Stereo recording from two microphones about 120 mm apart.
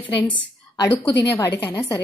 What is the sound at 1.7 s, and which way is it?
Speech, 25° left (ahead or behind).